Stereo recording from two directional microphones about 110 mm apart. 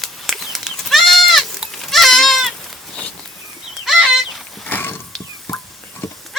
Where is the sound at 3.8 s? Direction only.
Centre (ahead or behind).